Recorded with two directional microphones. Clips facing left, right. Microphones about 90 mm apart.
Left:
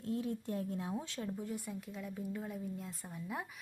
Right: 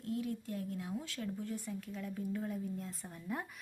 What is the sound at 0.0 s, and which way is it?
Speech, 30° left (ahead or behind).